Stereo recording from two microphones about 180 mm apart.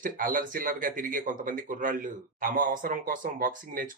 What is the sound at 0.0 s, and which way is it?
Speech, 50° right (ahead or behind).